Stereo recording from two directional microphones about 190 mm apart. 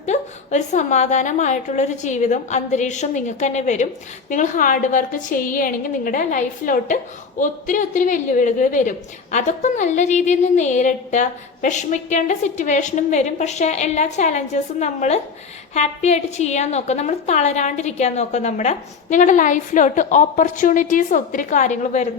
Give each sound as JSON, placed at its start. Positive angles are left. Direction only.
{"t": 0.0, "sound": "a woman's voice", "side_deg": 35}